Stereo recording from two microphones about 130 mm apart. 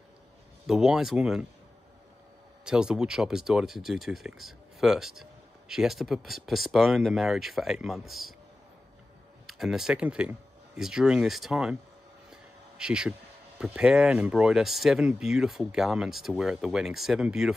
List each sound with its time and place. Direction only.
0.7 s speech: 5° right (ahead or behind)
2.6 s speech: 5° right (ahead or behind)
9.5 s speech: 5° right (ahead or behind)
12.3 s a sound: 5° right (ahead or behind)
13.6 s speech: 5° right (ahead or behind)